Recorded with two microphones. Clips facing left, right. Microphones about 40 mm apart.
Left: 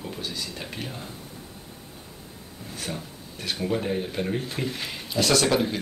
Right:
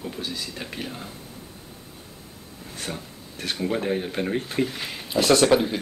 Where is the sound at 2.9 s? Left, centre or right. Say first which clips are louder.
Even; centre.